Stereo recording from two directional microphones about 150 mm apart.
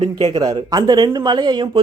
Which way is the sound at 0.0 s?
45° right (ahead or behind).